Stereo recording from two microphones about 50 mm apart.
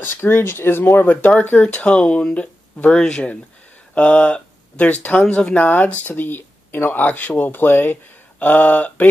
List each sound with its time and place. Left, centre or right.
0.0 s speech: left
1.0 s speech: left
1.6 s speech: left